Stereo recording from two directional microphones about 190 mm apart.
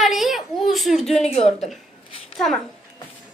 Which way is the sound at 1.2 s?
35° left (ahead or behind).